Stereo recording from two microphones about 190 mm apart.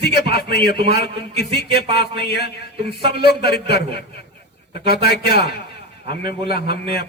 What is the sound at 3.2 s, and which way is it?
A man's voice, 55° left (ahead or behind).